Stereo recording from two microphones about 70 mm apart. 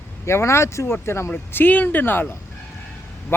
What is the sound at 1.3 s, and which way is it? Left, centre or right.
Speech, left.